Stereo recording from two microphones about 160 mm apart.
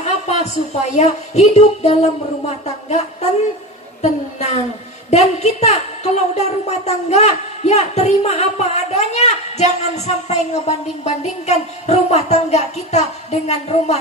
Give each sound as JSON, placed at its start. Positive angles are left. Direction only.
{"t": 0.0, "sound": "a woman's voice", "side_deg": 45}